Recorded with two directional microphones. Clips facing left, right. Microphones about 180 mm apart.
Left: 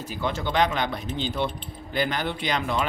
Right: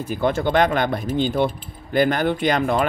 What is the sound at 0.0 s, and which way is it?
Speech, 50° right (ahead or behind).